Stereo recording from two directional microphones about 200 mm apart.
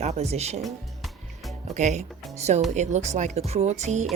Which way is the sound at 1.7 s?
35° right (ahead or behind).